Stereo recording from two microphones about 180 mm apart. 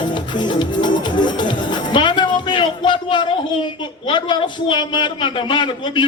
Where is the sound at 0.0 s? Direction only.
25° left (ahead or behind).